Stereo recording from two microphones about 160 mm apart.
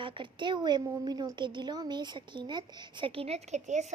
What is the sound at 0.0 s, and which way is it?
A woman's voice, 30° right (ahead or behind).